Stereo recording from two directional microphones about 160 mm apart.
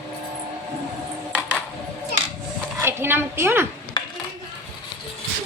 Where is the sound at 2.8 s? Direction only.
15° right (ahead or behind).